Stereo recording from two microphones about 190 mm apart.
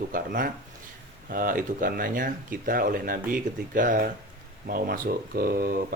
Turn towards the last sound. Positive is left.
turn(degrees=-50)  # may be behind; listen again after turning